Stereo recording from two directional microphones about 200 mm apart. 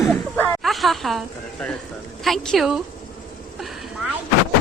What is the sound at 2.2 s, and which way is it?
Speech, centre (ahead or behind).